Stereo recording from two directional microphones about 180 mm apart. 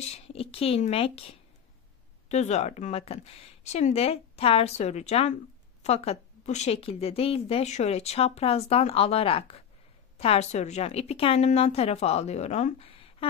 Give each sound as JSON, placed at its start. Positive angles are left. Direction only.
{"t": 0.0, "sound": "speech", "side_deg": 35}
{"t": 2.2, "sound": "speech", "side_deg": 40}